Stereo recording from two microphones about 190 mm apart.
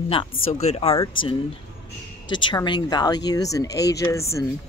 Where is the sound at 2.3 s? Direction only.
25° left (ahead or behind).